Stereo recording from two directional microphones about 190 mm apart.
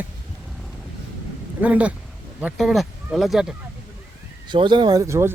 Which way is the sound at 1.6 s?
10° right (ahead or behind).